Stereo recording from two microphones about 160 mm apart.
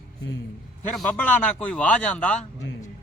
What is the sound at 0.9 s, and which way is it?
Speech, 5° left (ahead or behind).